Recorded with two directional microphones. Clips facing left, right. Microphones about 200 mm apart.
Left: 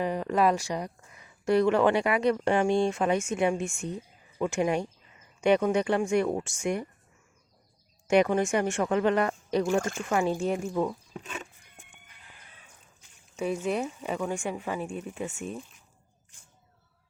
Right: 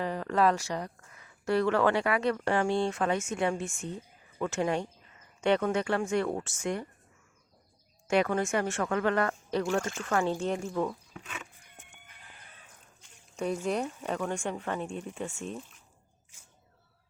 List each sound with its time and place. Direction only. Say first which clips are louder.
0.0 s speech: left 2 dB; 15° left (ahead or behind)
8.0 s speech: left 4 dB; 15° left (ahead or behind)
13.0 s speech: left 2 dB; 5° left (ahead or behind)